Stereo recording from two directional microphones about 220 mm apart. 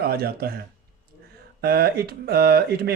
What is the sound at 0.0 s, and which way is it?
Speech, 45° right (ahead or behind).